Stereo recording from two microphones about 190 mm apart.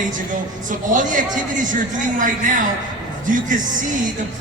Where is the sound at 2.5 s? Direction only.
45° right (ahead or behind).